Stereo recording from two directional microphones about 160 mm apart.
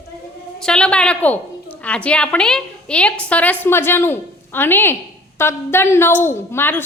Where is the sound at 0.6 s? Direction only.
5° left (ahead or behind).